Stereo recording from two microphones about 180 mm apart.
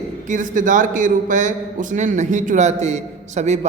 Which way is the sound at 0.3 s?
45° right (ahead or behind).